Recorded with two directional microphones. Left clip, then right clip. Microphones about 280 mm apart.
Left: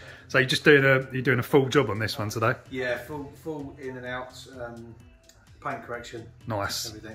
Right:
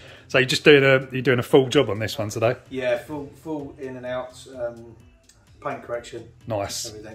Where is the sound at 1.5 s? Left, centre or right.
Centre.